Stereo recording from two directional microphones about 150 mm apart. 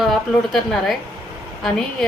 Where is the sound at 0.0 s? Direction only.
Centre (ahead or behind).